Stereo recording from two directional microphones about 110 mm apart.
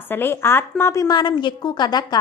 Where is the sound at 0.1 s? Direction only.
20° left (ahead or behind).